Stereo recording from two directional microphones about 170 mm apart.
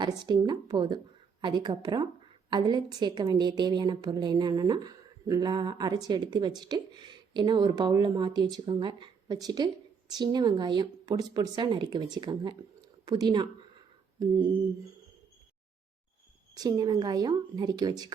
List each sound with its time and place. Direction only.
0.0 s a woman's voice: 25° right (ahead or behind)
16.6 s a woman's voice: 20° right (ahead or behind)